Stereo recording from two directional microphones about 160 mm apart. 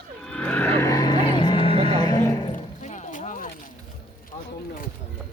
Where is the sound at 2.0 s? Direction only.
25° left (ahead or behind).